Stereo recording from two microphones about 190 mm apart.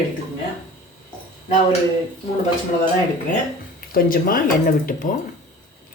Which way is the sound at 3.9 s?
50° left (ahead or behind).